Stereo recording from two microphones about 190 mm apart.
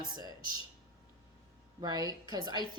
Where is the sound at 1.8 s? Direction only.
20° right (ahead or behind).